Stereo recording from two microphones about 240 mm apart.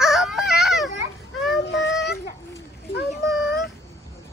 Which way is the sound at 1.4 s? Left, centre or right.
Centre.